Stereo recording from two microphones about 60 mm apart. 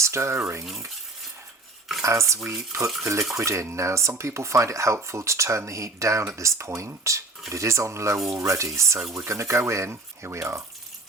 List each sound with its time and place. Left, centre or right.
0.0 s speech: right
2.0 s speech: right
9.9 s speech: right